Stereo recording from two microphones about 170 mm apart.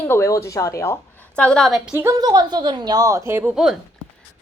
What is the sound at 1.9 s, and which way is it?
A woman's voice, 15° right (ahead or behind).